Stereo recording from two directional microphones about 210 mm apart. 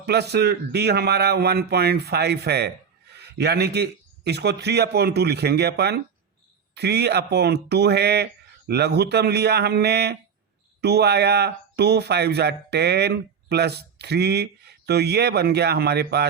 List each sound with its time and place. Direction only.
0.0 s speech: 50° right (ahead or behind)